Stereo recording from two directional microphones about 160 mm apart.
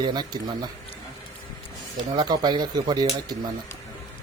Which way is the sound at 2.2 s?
30° right (ahead or behind).